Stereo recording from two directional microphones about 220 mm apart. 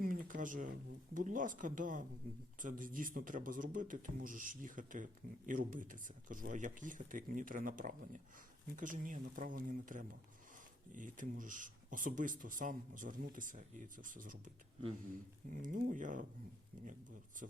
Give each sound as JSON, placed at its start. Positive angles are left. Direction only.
{"t": 0.0, "sound": "speech", "side_deg": -40}